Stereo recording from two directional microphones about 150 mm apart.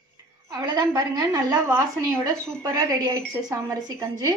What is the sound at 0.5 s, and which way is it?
Speech, 30° right (ahead or behind).